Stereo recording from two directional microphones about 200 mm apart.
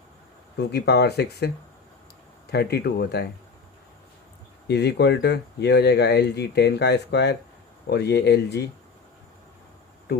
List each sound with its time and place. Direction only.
0.6 s speech: 55° left (ahead or behind)
2.5 s speech: 55° left (ahead or behind)
4.7 s speech: 55° left (ahead or behind)
10.1 s insect: 55° left (ahead or behind)